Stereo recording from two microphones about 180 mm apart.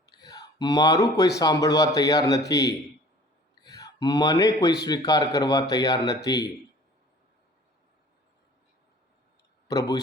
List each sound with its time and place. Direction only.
0.0 s whispering: 20° left (ahead or behind)
1.4 s speech: 20° left (ahead or behind)
3.5 s a sound: 20° left (ahead or behind)
4.9 s speech: 20° left (ahead or behind)
9.6 s a man's voice: 20° left (ahead or behind)